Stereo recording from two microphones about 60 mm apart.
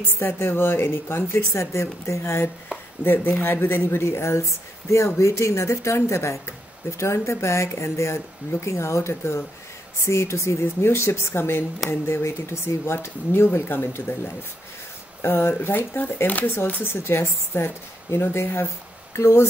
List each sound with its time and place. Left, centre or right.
0.0 s speech: left
3.0 s speech: left
10.6 s speech: left